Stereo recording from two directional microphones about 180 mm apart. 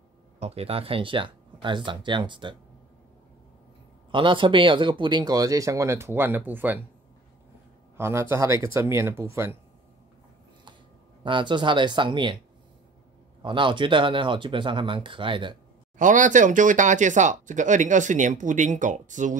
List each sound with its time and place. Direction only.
0.4 s speech: 35° right (ahead or behind)
4.1 s speech: 25° right (ahead or behind); by 6.8 s 10° right (ahead or behind)
8.0 s speech: 15° right (ahead or behind)
11.2 s speech: 25° right (ahead or behind)
13.4 s speech: 25° right (ahead or behind)
16.0 s speech: 45° right (ahead or behind)